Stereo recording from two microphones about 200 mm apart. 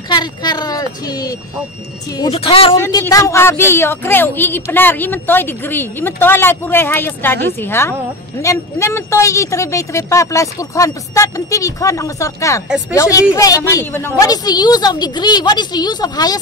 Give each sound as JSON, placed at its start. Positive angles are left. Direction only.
{"t": 0.1, "sound": "speech", "side_deg": 20}
{"t": 2.3, "sound": "a woman's voice", "side_deg": 30}
{"t": 2.8, "sound": "a woman's voice", "side_deg": 15}